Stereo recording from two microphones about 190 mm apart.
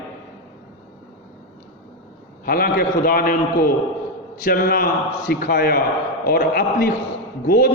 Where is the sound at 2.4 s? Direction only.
50° left (ahead or behind).